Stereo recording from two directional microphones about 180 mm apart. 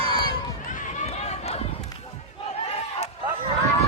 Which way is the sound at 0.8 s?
35° left (ahead or behind).